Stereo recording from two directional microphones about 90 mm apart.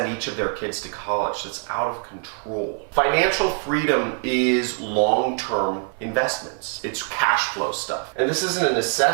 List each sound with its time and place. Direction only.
0.0 s speech: 15° right (ahead or behind)
1.7 s speech: 20° right (ahead or behind)